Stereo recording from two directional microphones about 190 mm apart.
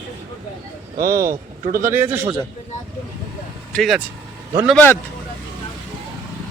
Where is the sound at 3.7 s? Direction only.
Centre (ahead or behind).